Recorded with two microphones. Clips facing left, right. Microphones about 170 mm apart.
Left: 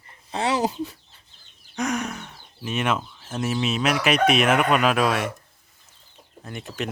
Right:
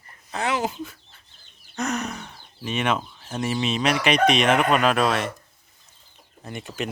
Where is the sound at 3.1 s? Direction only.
5° left (ahead or behind).